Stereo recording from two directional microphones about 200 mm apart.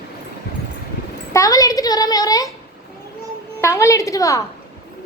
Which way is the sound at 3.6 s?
15° left (ahead or behind).